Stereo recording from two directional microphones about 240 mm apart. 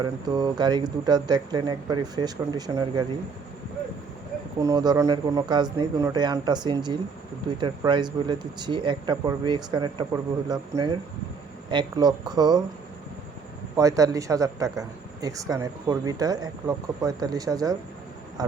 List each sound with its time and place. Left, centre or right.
0.0 s speech: centre
4.6 s speech: centre
13.7 s speech: centre